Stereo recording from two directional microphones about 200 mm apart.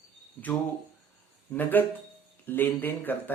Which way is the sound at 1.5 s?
10° left (ahead or behind).